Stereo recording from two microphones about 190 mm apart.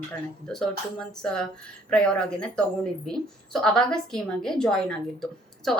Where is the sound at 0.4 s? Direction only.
Centre (ahead or behind).